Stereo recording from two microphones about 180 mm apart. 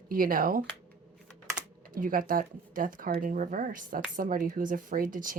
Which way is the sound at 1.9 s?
50° right (ahead or behind).